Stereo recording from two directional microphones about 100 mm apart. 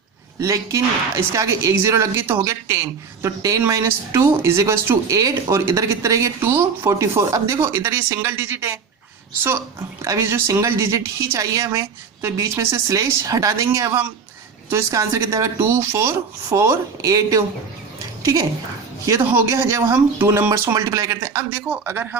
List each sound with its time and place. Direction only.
0.3 s a woman's voice: 30° right (ahead or behind)
10.0 s a woman's voice: 30° right (ahead or behind)
18.0 s a sound: 35° right (ahead or behind)
19.0 s speech: 30° right (ahead or behind)
21.7 s a man's voice: 15° right (ahead or behind)